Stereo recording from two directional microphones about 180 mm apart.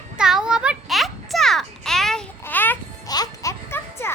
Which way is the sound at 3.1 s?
20° left (ahead or behind).